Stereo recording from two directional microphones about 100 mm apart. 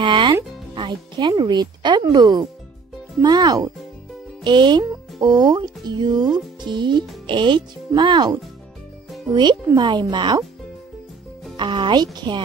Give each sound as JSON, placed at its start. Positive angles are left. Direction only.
{"t": 0.0, "sound": "music", "side_deg": -55}
{"t": 0.7, "sound": "speech", "side_deg": -50}
{"t": 9.3, "sound": "speech", "side_deg": -45}
{"t": 11.5, "sound": "speech", "side_deg": -55}